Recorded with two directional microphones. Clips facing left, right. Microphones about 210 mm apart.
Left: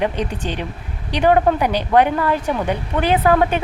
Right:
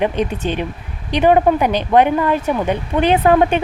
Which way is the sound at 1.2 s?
20° right (ahead or behind).